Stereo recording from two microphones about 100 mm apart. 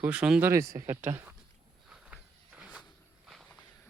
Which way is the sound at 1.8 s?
10° right (ahead or behind).